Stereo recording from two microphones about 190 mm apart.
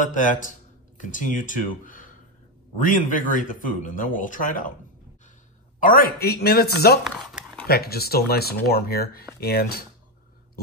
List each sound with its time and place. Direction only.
0.0 s speech: 40° left (ahead or behind)
5.8 s speech: 45° left (ahead or behind)
7.1 s a sound: centre (ahead or behind)
7.6 s speech: 55° left (ahead or behind)